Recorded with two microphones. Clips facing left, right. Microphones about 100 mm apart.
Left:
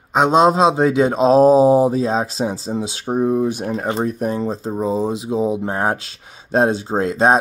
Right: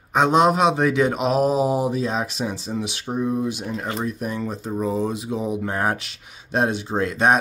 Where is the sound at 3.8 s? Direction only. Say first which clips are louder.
Left 7 dB; 30° left (ahead or behind).